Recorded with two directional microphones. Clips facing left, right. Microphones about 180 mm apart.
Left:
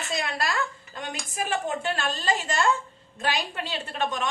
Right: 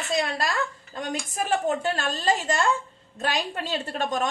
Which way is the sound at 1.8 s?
40° right (ahead or behind).